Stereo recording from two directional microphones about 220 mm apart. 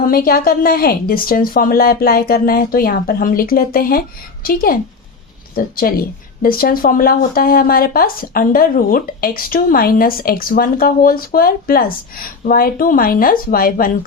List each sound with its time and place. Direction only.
0.0 s a woman's voice: 40° left (ahead or behind)